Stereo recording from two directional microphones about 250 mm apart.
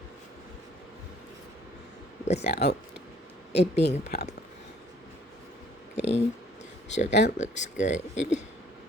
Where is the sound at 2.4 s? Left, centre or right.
Left.